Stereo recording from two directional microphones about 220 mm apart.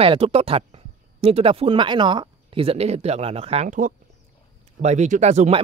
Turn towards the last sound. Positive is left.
turn(degrees=-30)  # may be behind; listen again after turning